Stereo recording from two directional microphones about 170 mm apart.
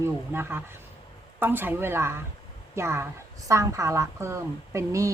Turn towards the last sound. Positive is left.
turn(degrees=-15)  # may be behind; listen again after turning